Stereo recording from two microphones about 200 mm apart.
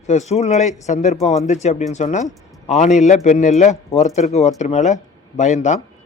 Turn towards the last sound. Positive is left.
turn(degrees=35)  # may be behind; listen again after turning